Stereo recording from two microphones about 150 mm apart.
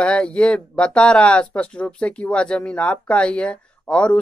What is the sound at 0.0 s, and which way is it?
Speech, 5° left (ahead or behind).